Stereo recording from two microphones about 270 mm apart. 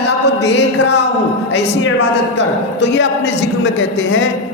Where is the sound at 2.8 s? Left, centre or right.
Left.